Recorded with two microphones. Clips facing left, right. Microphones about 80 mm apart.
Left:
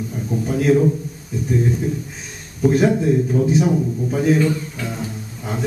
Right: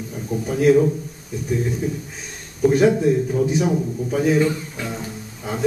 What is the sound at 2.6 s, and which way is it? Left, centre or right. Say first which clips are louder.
A man's voice: right 1 dB; centre.